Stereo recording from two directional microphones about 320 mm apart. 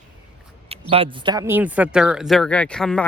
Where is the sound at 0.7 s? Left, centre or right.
Centre.